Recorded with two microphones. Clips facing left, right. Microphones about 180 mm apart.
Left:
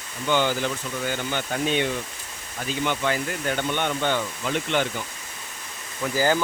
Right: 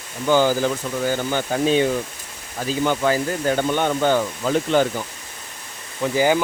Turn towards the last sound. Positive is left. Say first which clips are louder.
# right 4 dB
turn(degrees=-15)  # may be behind; listen again after turning